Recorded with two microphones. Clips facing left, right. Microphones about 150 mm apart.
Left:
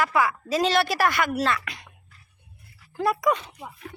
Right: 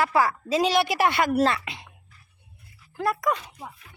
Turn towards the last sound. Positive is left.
turn(degrees=0)  # may be behind; listen again after turning